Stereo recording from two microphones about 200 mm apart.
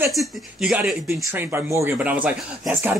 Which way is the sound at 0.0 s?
5° right (ahead or behind).